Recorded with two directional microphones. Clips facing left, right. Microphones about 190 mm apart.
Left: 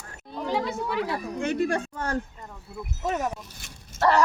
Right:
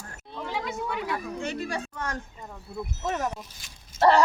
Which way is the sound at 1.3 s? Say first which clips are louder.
Left 6 dB; 55° left (ahead or behind).